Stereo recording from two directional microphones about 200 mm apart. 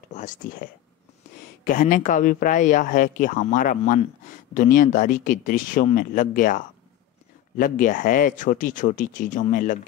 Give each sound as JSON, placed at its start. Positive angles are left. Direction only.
{"t": 0.1, "sound": "speech", "side_deg": 40}